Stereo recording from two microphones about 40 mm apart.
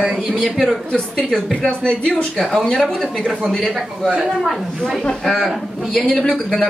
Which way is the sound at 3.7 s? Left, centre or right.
Centre.